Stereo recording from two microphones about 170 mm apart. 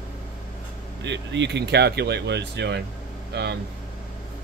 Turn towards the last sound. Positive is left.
turn(degrees=-75)  # may be behind; listen again after turning